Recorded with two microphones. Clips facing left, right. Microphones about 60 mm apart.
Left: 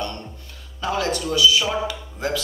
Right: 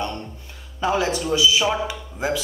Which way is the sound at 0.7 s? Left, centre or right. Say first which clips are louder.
Right 2 dB; centre.